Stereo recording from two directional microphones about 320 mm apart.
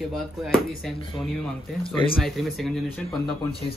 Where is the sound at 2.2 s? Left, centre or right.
Centre.